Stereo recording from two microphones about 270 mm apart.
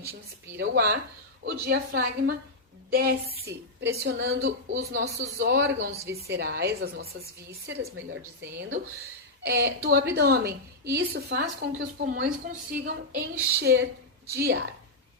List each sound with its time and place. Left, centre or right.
0.1 s a woman's voice: right